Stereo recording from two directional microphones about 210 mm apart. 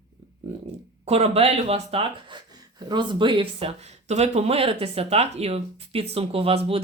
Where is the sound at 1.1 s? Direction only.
30° right (ahead or behind).